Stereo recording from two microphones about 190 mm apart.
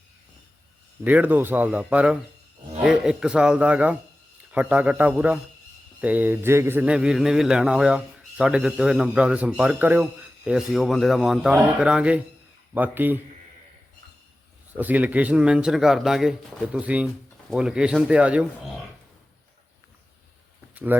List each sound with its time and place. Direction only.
1.0 s speech: 10° right (ahead or behind)
14.8 s speech: 10° right (ahead or behind)